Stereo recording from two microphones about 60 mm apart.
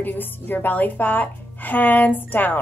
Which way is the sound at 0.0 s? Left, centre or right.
Left.